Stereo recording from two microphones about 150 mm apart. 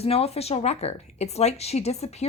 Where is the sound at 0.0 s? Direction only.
40° left (ahead or behind).